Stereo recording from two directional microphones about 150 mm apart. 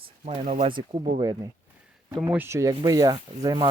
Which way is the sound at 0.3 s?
45° right (ahead or behind).